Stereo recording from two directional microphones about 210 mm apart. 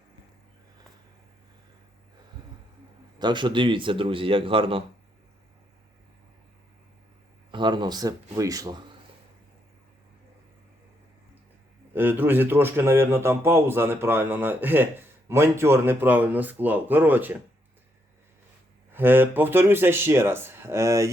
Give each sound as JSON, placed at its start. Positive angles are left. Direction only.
{"t": 3.2, "sound": "a man's voice", "side_deg": -20}
{"t": 7.5, "sound": "a man's voice", "side_deg": -20}
{"t": 11.9, "sound": "a man's voice", "side_deg": -10}
{"t": 18.9, "sound": "a man's voice", "side_deg": -10}